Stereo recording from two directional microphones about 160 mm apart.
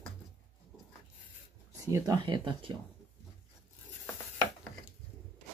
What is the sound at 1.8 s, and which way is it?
Speech, 20° right (ahead or behind).